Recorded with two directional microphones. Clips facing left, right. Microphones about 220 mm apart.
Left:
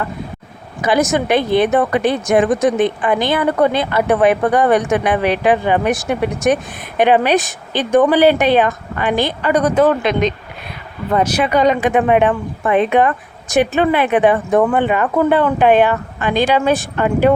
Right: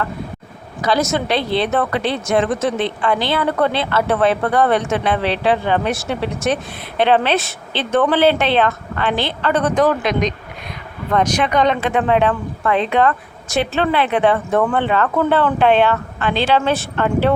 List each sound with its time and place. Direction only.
0.8 s a woman's voice: 20° left (ahead or behind)